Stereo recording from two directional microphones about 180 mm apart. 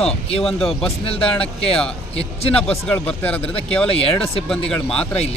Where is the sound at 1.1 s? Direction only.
30° left (ahead or behind).